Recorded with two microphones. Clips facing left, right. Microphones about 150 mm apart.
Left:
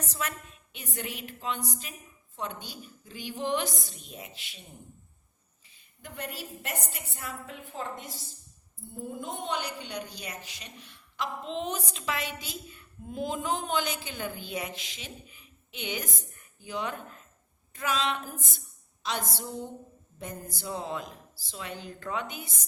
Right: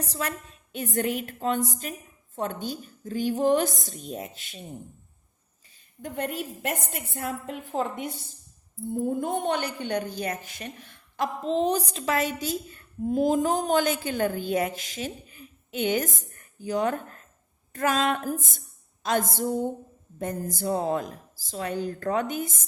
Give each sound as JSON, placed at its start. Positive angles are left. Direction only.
{"t": 0.0, "sound": "a woman's voice", "side_deg": -35}
{"t": 6.0, "sound": "a woman's voice", "side_deg": -45}
{"t": 7.7, "sound": "a woman's voice", "side_deg": -75}
{"t": 8.9, "sound": "a woman's voice", "side_deg": -50}